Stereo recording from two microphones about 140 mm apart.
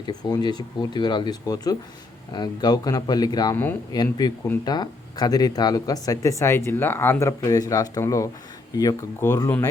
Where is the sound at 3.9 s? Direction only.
30° left (ahead or behind).